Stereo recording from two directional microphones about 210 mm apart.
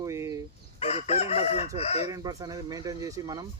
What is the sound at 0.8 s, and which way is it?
Chicken, 30° left (ahead or behind).